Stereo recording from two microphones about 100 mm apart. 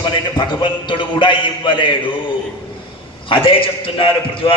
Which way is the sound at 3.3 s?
60° left (ahead or behind).